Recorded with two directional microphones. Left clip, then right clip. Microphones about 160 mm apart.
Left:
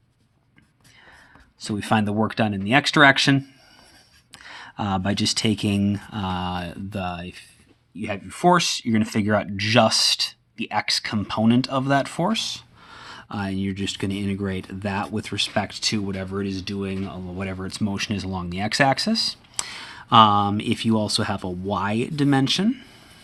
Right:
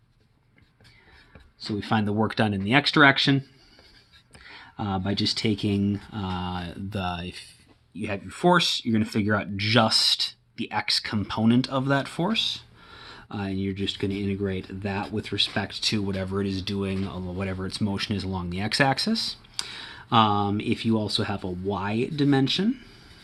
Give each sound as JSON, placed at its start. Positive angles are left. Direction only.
{"t": 1.5, "sound": "speech", "side_deg": 50}
{"t": 2.1, "sound": "speech", "side_deg": 15}
{"t": 2.8, "sound": "speech", "side_deg": 35}
{"t": 4.4, "sound": "speech", "side_deg": 50}
{"t": 6.9, "sound": "speech", "side_deg": 15}
{"t": 8.0, "sound": "speech", "side_deg": 20}
{"t": 16.0, "sound": "speech", "side_deg": 10}
{"t": 19.6, "sound": "speech", "side_deg": 45}